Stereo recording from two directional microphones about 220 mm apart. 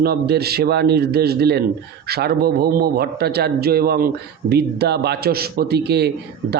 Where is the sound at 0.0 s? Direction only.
45° right (ahead or behind).